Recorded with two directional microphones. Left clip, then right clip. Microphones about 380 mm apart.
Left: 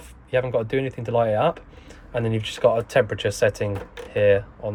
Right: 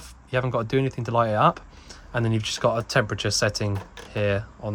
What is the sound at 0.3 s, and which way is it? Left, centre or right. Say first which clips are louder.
Speech: left 2 dB; centre.